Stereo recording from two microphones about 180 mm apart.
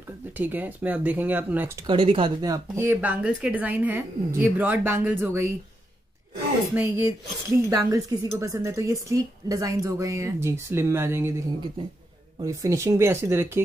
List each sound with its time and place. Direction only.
0.4 s speech: 10° right (ahead or behind)
1.9 s speech: 30° right (ahead or behind); by 5.5 s 10° right (ahead or behind)
6.7 s speech: 10° right (ahead or behind)